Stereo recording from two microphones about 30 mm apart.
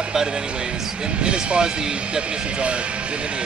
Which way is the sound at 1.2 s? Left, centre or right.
Right.